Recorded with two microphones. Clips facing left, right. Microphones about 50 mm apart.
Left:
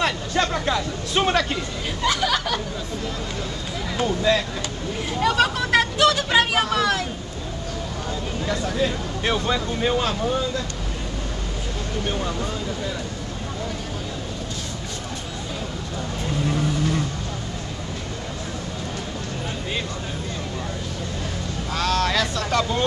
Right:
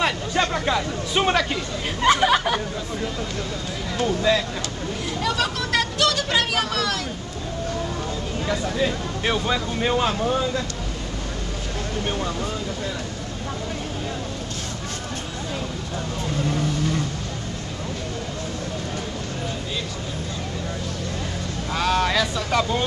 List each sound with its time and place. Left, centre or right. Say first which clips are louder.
0.0 s speech: even; centre
2.0 s speech: right 5 dB; right
5.2 s vehicle: left 5 dB; centre
8.5 s speech: even; centre
12.1 s speech: left 1 dB; centre
16.4 s vehicle: left 2 dB; centre
21.7 s speech: right 1 dB; centre